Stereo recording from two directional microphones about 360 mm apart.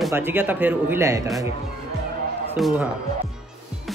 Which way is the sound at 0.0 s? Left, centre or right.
Centre.